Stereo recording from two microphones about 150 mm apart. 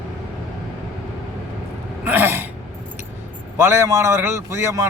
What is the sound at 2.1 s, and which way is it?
Throat clearing, 15° right (ahead or behind).